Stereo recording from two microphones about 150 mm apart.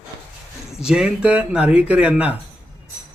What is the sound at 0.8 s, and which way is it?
Speech, 5° right (ahead or behind).